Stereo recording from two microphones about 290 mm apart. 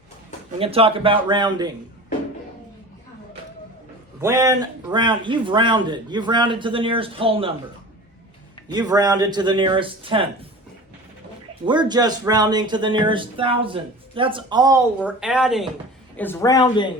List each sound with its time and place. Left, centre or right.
0.6 s speech: centre
4.2 s speech: centre
8.7 s speech: centre
11.6 s speech: centre